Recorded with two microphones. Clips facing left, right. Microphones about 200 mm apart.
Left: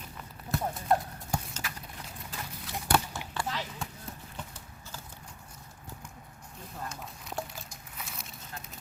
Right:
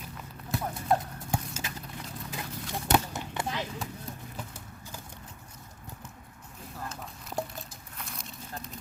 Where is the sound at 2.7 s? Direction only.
20° right (ahead or behind).